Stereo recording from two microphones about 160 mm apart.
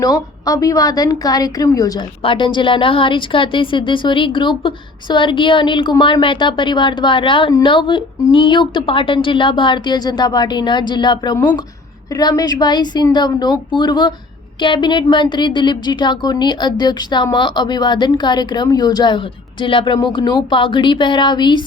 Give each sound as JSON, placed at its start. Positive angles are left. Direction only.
{"t": 0.0, "sound": "a woman's voice", "side_deg": 20}